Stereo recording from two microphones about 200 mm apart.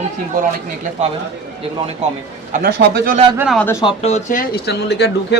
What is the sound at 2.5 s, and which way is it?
Speech, 45° right (ahead or behind).